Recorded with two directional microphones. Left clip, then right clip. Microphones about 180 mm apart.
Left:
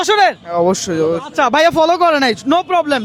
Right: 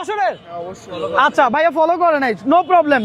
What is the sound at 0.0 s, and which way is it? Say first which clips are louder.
Speech: left 8 dB; 30° left (ahead or behind).